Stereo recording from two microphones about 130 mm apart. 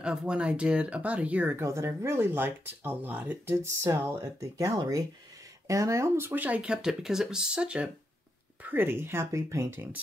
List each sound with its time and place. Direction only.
0.0 s speech: 5° right (ahead or behind)